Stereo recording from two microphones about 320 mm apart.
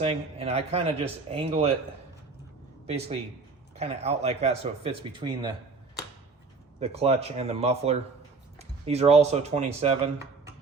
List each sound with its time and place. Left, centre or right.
0.0 s speech: centre
2.8 s speech: centre
6.7 s speech: centre